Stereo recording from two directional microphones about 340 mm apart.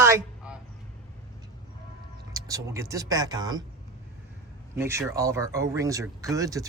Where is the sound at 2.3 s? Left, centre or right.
Centre.